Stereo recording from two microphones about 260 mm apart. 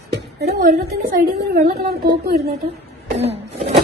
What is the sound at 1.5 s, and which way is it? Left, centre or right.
Speech, right.